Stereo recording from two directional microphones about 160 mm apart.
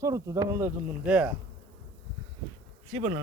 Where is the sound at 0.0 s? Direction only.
20° right (ahead or behind).